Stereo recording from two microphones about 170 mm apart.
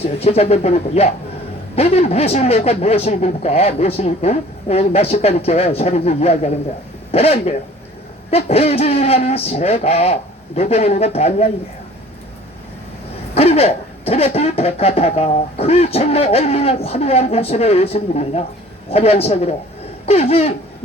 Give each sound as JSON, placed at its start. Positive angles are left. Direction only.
{"t": 0.0, "sound": "speech", "side_deg": 35}
{"t": 13.3, "sound": "speech", "side_deg": 35}